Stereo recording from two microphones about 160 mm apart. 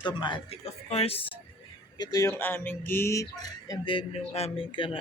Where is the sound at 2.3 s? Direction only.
10° left (ahead or behind).